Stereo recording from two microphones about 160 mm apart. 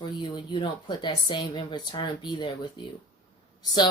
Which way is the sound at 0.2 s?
30° left (ahead or behind).